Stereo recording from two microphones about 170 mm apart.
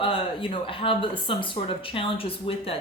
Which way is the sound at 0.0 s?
30° left (ahead or behind).